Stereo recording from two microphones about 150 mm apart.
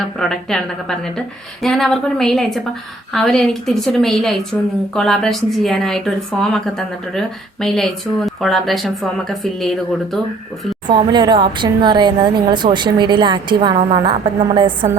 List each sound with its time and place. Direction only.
0.2 s a woman's voice: 5° left (ahead or behind)
10.8 s speech: 30° right (ahead or behind)